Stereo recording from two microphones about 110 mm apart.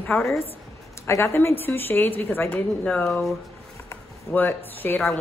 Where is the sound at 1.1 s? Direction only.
25° left (ahead or behind).